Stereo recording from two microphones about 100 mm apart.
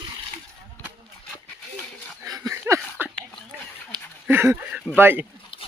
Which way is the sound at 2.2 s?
30° right (ahead or behind).